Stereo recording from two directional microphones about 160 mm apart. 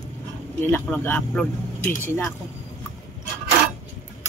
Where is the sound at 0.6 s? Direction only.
10° left (ahead or behind).